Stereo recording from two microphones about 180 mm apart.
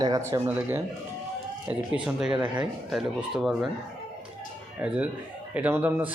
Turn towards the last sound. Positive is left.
turn(degrees=-10)  # may be behind; listen again after turning